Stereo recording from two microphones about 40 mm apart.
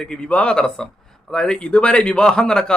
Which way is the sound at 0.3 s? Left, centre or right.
Left.